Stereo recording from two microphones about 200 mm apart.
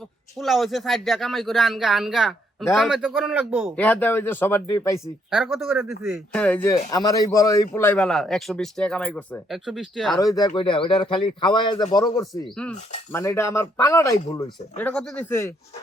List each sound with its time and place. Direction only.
0.3 s a man's voice: centre (ahead or behind)
3.8 s speech: 10° left (ahead or behind)
5.3 s a man's voice: centre (ahead or behind)
10.2 s a man's voice: 20° left (ahead or behind)